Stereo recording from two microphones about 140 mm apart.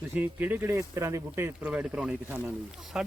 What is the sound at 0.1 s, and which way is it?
Speech, 10° right (ahead or behind).